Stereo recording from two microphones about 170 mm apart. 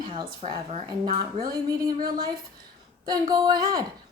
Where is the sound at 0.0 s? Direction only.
25° right (ahead or behind).